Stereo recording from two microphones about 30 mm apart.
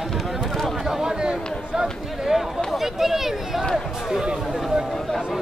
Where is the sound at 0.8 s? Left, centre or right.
Centre.